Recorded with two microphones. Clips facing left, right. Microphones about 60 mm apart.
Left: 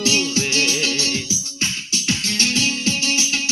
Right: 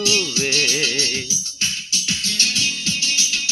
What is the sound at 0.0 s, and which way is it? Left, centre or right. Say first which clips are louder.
Music: left 1 dB; left.